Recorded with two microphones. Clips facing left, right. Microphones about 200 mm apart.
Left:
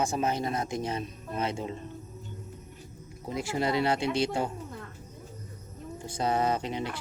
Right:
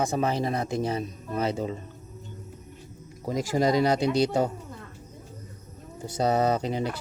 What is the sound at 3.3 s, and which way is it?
Speech, 40° right (ahead or behind).